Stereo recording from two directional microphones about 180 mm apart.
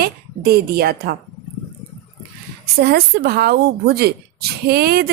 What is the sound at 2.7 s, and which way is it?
A woman's voice, 60° right (ahead or behind).